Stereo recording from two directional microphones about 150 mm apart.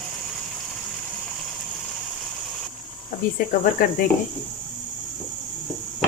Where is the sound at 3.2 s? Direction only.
70° left (ahead or behind).